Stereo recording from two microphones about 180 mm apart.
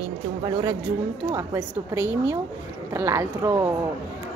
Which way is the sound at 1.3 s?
15° right (ahead or behind).